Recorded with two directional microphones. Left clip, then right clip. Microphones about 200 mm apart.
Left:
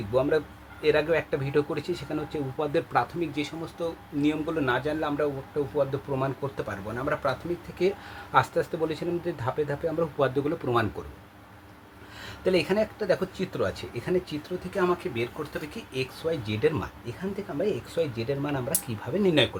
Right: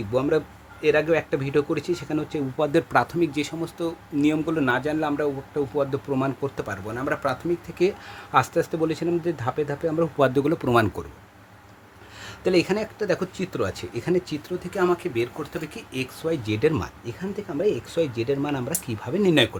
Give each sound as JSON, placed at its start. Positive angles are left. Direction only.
{"t": 0.1, "sound": "speech", "side_deg": -40}
{"t": 7.8, "sound": "speech", "side_deg": -45}
{"t": 12.2, "sound": "speech", "side_deg": -45}